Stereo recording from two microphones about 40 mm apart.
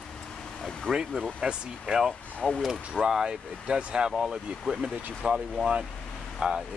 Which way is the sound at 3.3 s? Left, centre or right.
Centre.